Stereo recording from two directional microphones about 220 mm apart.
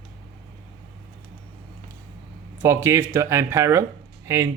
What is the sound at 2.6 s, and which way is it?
Speech, 10° right (ahead or behind).